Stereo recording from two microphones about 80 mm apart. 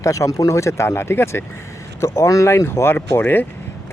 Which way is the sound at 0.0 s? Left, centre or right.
Left.